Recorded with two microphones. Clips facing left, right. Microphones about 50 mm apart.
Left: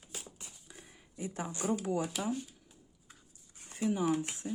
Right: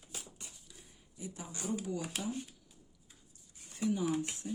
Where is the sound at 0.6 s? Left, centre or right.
Left.